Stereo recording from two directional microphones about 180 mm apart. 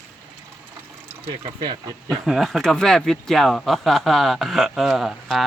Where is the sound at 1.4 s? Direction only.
25° right (ahead or behind).